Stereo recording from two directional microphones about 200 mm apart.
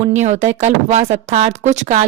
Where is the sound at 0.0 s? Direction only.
35° right (ahead or behind).